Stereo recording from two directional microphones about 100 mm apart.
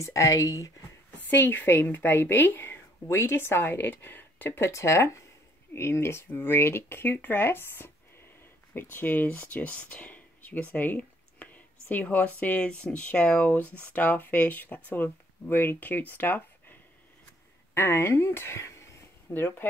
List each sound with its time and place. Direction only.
0.0 s speech: 30° left (ahead or behind)
1.1 s a woman's voice: 15° left (ahead or behind)
17.7 s speech: 20° left (ahead or behind)